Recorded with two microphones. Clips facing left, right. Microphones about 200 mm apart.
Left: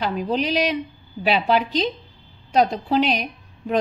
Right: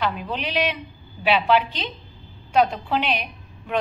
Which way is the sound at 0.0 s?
40° left (ahead or behind).